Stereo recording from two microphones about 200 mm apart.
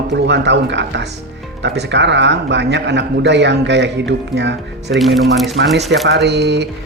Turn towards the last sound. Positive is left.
turn(degrees=-60)  # may be behind; listen again after turning